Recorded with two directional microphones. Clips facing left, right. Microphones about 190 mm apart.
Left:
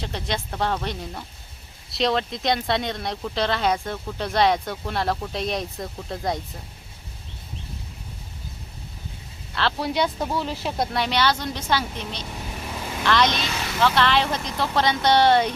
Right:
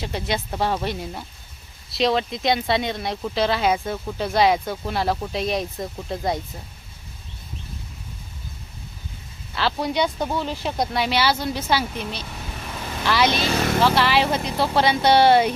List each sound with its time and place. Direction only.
0.0 s speech: 5° right (ahead or behind)
9.6 s speech: centre (ahead or behind)
12.6 s vehicle: 10° left (ahead or behind)
13.0 s speech: 5° right (ahead or behind)
13.5 s vehicle: 45° right (ahead or behind)
13.8 s speech: 5° right (ahead or behind)